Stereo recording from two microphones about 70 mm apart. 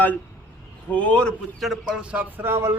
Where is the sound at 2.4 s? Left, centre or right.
Right.